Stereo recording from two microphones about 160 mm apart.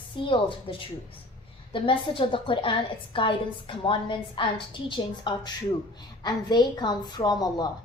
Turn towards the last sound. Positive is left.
turn(degrees=25)  # may be behind; listen again after turning